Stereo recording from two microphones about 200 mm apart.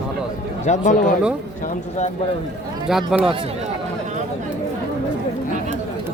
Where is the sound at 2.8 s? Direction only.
5° right (ahead or behind).